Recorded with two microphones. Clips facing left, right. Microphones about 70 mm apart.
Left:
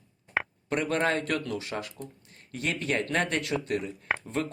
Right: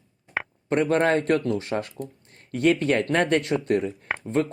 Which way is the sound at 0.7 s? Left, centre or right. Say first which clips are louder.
Right 6 dB; right.